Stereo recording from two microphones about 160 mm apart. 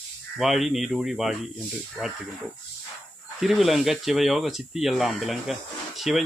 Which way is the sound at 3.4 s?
Centre (ahead or behind).